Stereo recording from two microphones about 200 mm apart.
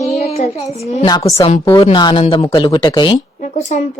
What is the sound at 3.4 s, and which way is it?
Speech, 35° left (ahead or behind).